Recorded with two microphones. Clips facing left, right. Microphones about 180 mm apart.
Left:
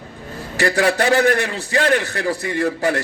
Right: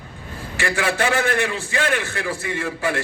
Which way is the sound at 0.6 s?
40° left (ahead or behind).